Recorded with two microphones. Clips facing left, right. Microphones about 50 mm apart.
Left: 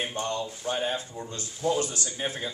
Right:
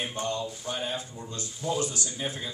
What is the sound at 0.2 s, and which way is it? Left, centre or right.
Speech, left.